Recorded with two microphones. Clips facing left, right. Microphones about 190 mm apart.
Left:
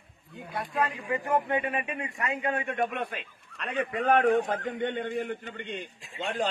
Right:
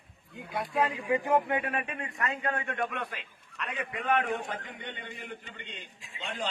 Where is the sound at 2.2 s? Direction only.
20° left (ahead or behind).